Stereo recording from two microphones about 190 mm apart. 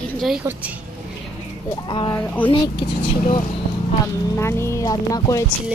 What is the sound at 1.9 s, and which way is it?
Speech, 25° left (ahead or behind).